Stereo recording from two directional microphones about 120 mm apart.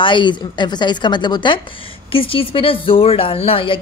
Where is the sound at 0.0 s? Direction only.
40° left (ahead or behind).